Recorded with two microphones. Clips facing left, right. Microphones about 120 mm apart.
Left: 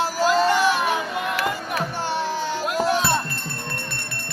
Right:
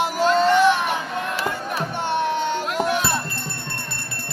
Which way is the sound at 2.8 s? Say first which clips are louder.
Left 1 dB; 15° right (ahead or behind).